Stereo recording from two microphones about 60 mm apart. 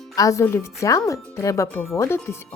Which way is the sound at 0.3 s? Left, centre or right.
Left.